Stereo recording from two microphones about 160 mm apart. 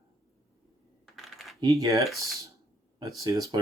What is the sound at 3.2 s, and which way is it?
Speech, 25° right (ahead or behind).